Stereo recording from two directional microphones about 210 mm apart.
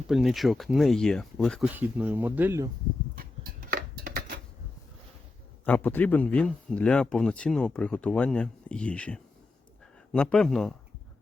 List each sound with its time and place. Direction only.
0.1 s speech: centre (ahead or behind)
3.2 s a sound: 45° right (ahead or behind)
5.6 s speech: 10° left (ahead or behind)